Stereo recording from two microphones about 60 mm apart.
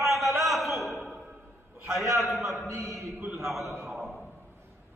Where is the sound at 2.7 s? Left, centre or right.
Right.